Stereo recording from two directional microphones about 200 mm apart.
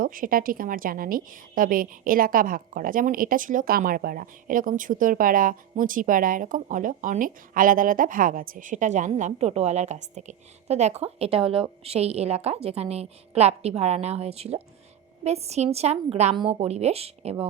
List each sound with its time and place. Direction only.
0.0 s a woman's voice: 45° right (ahead or behind)